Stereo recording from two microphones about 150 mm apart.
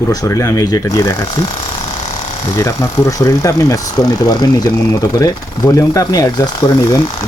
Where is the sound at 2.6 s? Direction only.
20° left (ahead or behind).